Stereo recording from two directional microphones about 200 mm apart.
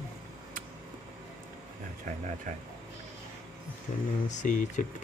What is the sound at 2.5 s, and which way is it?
Speech, 40° right (ahead or behind).